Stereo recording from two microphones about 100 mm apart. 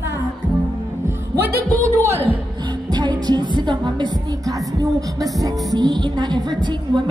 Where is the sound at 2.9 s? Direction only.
45° right (ahead or behind).